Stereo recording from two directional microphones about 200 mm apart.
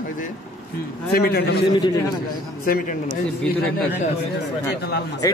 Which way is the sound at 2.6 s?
45° left (ahead or behind).